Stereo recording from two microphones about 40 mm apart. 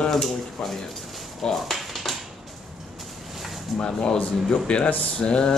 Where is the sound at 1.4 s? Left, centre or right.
Centre.